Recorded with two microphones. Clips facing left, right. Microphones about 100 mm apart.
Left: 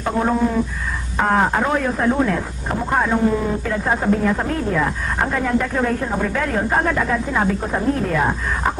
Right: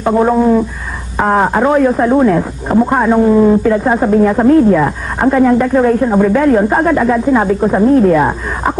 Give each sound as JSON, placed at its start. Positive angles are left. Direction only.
{"t": 0.0, "sound": "speech", "side_deg": -25}